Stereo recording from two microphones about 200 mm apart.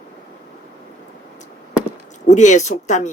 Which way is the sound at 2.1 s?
35° left (ahead or behind).